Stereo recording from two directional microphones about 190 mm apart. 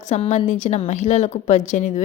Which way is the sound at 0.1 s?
35° left (ahead or behind).